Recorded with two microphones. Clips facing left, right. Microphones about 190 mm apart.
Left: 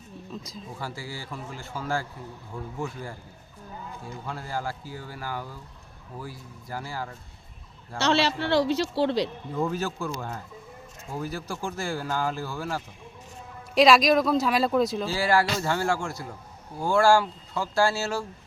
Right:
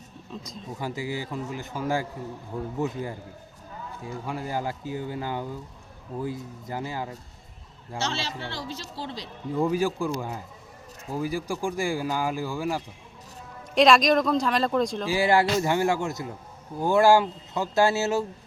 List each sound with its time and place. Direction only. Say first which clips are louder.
0.4 s speech: right 1 dB; centre (ahead or behind)
0.8 s speech: right 7 dB; 20° right (ahead or behind)
7.9 s speech: left 7 dB; 70° left (ahead or behind)
9.6 s speech: right 4 dB; 15° right (ahead or behind)
13.7 s speech: even; 5° left (ahead or behind)
15.0 s speech: right 2 dB; 15° right (ahead or behind)